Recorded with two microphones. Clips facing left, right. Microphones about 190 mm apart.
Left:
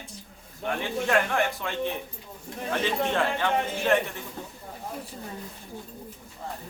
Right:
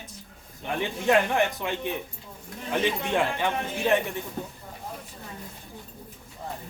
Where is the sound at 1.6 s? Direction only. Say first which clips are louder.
Right 2 dB; 15° right (ahead or behind).